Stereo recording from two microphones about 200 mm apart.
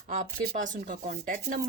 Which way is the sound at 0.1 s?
40° right (ahead or behind).